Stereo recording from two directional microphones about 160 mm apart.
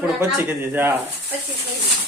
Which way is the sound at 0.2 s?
15° right (ahead or behind).